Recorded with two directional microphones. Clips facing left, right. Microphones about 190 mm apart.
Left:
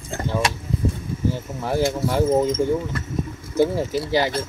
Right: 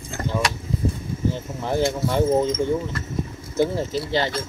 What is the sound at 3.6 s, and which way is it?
Speech, 10° left (ahead or behind).